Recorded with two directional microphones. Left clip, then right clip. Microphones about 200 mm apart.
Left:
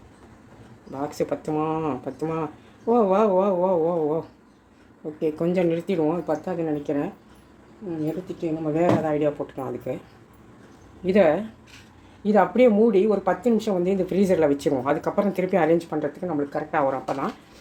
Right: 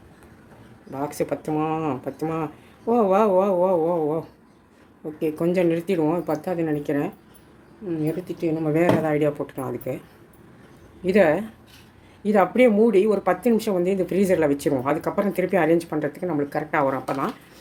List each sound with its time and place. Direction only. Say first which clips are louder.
0.9 s speech: right 1 dB; 10° right (ahead or behind)
11.0 s speech: right 1 dB; 10° right (ahead or behind)